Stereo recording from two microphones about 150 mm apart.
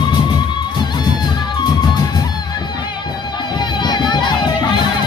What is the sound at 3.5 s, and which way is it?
Crowd, 30° left (ahead or behind).